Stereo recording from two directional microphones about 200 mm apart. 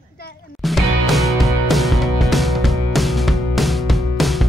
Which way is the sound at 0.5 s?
Centre (ahead or behind).